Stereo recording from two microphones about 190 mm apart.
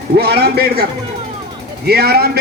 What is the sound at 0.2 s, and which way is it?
Speech, 55° right (ahead or behind).